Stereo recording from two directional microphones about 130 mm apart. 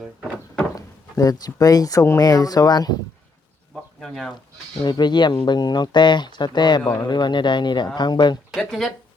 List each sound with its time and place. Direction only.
0.8 s speech: 25° left (ahead or behind)
4.0 s speech: 5° left (ahead or behind)
4.8 s speech: 35° left (ahead or behind)
8.5 s speech: centre (ahead or behind)